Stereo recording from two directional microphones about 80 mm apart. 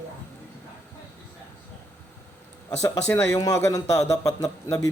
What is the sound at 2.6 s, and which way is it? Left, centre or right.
Speech, left.